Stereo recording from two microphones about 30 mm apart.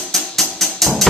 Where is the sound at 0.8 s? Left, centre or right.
Centre.